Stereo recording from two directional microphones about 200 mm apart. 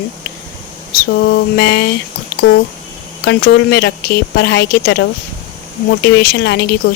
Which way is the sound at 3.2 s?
55° left (ahead or behind).